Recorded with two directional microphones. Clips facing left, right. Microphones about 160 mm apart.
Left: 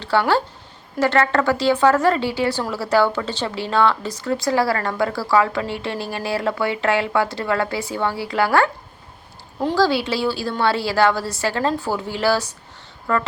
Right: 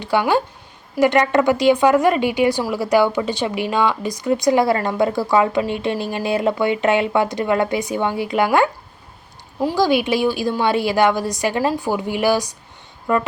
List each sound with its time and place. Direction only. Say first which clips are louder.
0.0 s speech: right 1 dB; 15° right (ahead or behind)